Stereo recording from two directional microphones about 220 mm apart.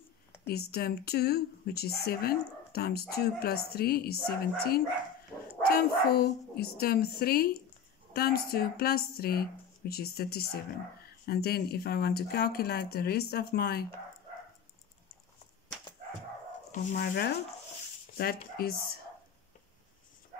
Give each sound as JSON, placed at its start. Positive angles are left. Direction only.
{"t": 0.5, "sound": "speech", "side_deg": 45}
{"t": 16.7, "sound": "speech", "side_deg": 45}